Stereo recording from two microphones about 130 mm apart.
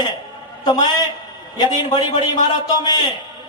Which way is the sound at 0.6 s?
30° left (ahead or behind).